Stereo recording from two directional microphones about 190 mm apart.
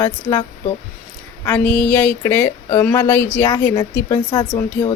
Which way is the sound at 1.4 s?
10° left (ahead or behind).